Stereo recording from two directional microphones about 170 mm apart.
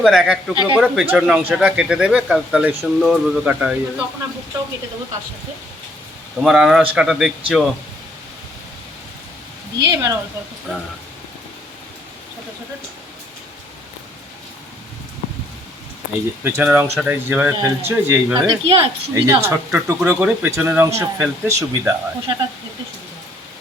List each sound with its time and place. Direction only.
0.0 s speech: centre (ahead or behind)
6.4 s speech: centre (ahead or behind)
9.8 s speech: 20° right (ahead or behind)
16.4 s speech: 10° right (ahead or behind)
18.4 s a woman's voice: 35° right (ahead or behind)
19.1 s speech: 20° right (ahead or behind)